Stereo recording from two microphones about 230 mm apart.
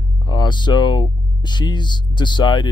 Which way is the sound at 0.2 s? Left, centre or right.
Centre.